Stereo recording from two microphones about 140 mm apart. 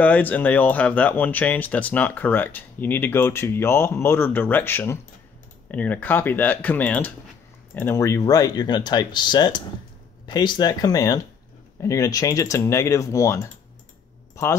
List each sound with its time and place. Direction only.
0.0 s speech: 10° left (ahead or behind)